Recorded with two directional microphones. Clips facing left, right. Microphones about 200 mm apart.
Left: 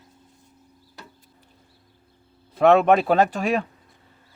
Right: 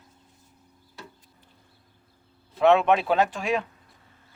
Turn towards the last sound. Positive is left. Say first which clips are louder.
# left 4 dB
turn(degrees=45)  # may be behind; listen again after turning